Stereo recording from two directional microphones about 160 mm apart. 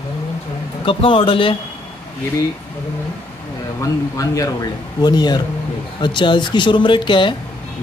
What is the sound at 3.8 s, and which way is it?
Speech, 20° left (ahead or behind).